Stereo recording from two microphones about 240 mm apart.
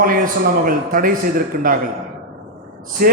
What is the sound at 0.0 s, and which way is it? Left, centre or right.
A man's voice, right.